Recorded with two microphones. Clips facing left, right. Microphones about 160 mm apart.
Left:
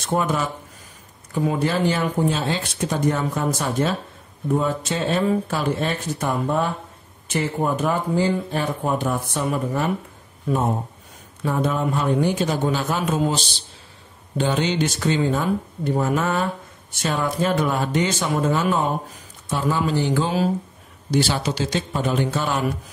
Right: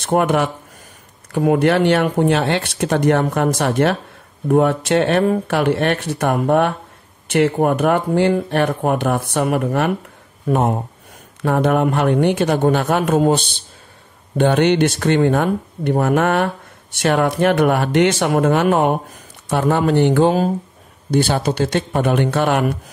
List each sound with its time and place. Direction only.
0.0 s speech: 65° right (ahead or behind)
10.5 s speech: 60° right (ahead or behind)
11.4 s speech: 70° right (ahead or behind)